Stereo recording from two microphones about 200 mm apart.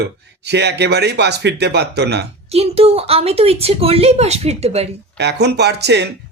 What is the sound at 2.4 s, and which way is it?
A woman's voice, 30° right (ahead or behind).